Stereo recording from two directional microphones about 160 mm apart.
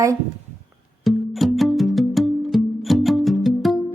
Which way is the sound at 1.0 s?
Centre (ahead or behind).